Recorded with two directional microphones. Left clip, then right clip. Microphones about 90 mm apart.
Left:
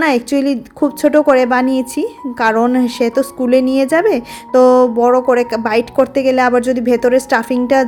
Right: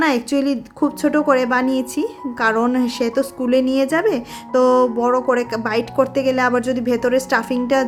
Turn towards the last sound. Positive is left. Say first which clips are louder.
# left 5 dB
turn(degrees=30)  # may be behind; listen again after turning